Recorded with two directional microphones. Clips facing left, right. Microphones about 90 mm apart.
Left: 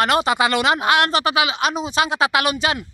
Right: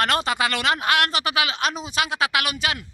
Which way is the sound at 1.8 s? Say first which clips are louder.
Left 5 dB; 25° left (ahead or behind).